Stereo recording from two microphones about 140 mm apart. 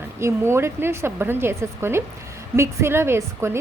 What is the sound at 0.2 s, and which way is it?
A woman's voice, 20° right (ahead or behind).